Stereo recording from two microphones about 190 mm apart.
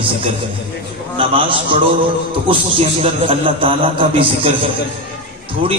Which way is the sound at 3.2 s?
25° right (ahead or behind).